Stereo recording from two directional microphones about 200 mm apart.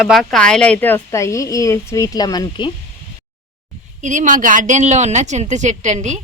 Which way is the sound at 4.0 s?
40° right (ahead or behind).